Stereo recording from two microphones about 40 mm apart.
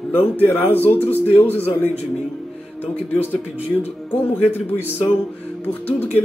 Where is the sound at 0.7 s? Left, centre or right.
Left.